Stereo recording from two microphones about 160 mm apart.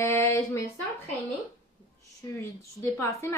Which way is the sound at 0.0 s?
15° left (ahead or behind).